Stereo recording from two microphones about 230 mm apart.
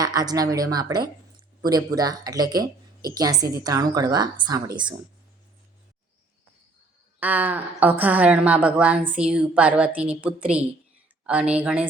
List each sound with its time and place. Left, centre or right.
0.0 s speech: centre
7.2 s a woman's voice: centre